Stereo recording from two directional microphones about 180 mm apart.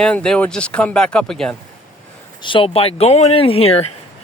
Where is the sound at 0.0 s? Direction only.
5° left (ahead or behind).